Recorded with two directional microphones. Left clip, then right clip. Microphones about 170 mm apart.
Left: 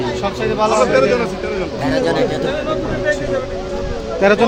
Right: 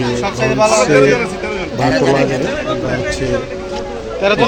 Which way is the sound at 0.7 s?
30° right (ahead or behind).